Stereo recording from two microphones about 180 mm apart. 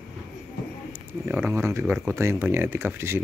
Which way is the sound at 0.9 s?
5° right (ahead or behind).